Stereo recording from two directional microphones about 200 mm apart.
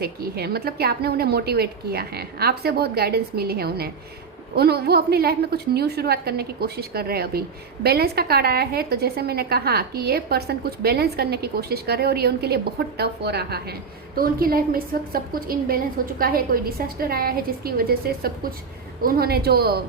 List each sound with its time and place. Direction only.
0.0 s a woman's voice: 50° right (ahead or behind)